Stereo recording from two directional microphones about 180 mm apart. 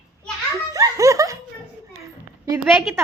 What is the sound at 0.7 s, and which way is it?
Laughter, 20° right (ahead or behind).